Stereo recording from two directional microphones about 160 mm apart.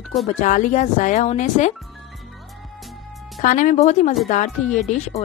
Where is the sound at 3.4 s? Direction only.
50° left (ahead or behind).